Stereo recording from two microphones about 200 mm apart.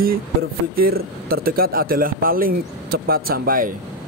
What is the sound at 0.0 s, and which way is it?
Speech, 45° right (ahead or behind).